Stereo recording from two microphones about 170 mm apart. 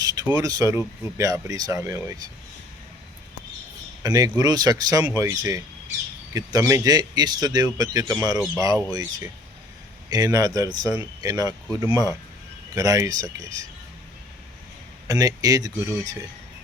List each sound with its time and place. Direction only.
0.0 s speech: 20° right (ahead or behind)
4.0 s speech: 20° right (ahead or behind)
15.0 s speech: 20° right (ahead or behind)